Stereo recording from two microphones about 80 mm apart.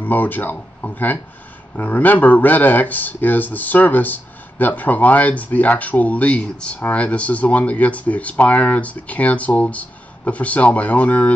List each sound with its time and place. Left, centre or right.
0.0 s speech: left